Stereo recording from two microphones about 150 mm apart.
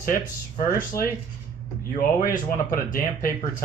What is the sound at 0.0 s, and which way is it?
Speech, 65° left (ahead or behind).